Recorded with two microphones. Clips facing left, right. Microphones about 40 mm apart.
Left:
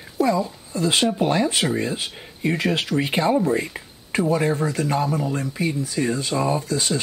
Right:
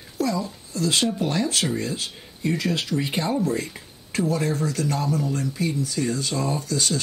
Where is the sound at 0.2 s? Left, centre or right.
Left.